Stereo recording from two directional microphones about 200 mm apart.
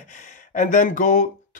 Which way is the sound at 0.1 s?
35° left (ahead or behind).